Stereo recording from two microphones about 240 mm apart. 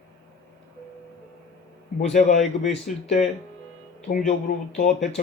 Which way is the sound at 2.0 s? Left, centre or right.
Left.